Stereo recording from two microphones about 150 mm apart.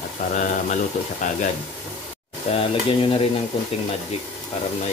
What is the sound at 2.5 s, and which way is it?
Stir, 35° left (ahead or behind).